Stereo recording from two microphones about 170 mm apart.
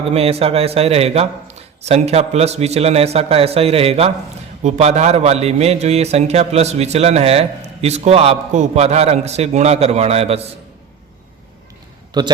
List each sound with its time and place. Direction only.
0.1 s a man's voice: 35° right (ahead or behind)
12.1 s a man's voice: 25° right (ahead or behind)